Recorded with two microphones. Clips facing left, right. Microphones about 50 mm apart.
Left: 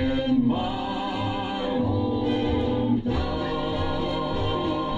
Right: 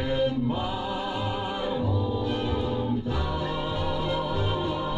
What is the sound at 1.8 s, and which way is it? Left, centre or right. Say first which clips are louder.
Music: left 3 dB; left.